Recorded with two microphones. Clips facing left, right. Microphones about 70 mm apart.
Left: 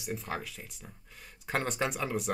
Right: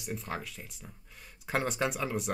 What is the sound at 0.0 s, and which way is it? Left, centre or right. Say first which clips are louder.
Speech: left 1 dB; centre.